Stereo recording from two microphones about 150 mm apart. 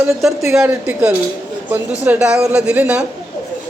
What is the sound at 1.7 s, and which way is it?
A woman's voice, 10° right (ahead or behind).